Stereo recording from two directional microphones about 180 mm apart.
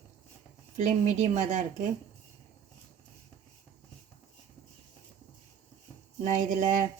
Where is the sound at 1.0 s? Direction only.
45° right (ahead or behind).